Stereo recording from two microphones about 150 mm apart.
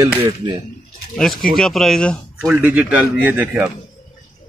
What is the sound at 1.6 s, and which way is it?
Speech, centre (ahead or behind).